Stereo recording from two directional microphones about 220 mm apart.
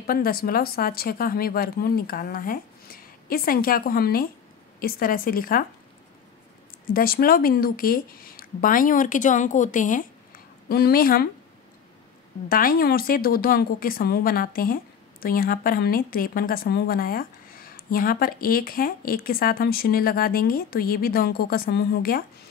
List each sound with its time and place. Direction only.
0.0 s a woman's voice: 40° left (ahead or behind)
6.9 s a woman's voice: 40° left (ahead or behind)
12.4 s a woman's voice: 40° left (ahead or behind)